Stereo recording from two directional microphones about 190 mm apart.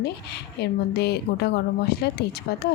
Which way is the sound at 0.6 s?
60° left (ahead or behind).